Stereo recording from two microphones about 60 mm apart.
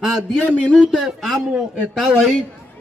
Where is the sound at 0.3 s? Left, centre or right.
Centre.